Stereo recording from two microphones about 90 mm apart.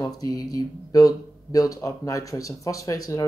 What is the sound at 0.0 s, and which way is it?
Speech, 45° left (ahead or behind).